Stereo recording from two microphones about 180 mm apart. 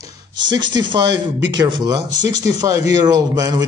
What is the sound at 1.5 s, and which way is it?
Speech, 25° right (ahead or behind).